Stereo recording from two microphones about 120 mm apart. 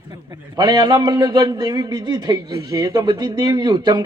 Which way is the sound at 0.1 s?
35° right (ahead or behind).